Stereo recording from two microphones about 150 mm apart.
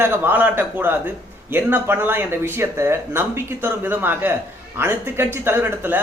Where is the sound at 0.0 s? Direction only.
15° right (ahead or behind).